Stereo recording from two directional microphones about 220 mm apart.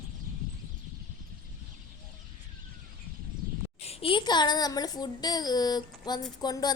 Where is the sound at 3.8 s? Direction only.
25° left (ahead or behind).